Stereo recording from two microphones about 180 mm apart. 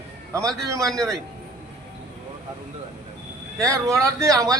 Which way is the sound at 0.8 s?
Centre (ahead or behind).